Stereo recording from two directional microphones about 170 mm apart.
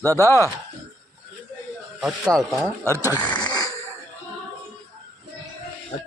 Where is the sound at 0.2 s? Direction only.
15° left (ahead or behind).